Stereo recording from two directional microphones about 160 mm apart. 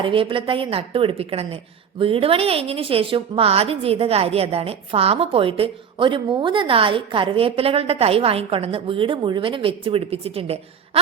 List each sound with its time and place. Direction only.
0.0 s a woman's voice: 35° right (ahead or behind)